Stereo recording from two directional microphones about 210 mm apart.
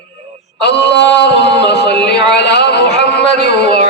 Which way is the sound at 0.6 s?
55° left (ahead or behind).